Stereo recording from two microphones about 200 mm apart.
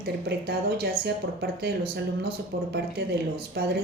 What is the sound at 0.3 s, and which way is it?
A woman's voice, 55° right (ahead or behind).